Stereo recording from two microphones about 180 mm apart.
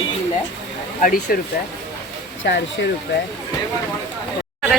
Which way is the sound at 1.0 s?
50° left (ahead or behind).